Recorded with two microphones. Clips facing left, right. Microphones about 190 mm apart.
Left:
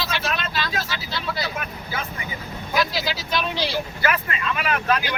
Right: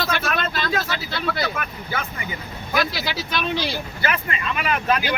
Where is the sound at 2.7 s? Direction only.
60° right (ahead or behind).